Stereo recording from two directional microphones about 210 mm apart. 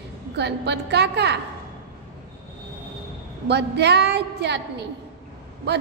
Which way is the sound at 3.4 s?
50° right (ahead or behind).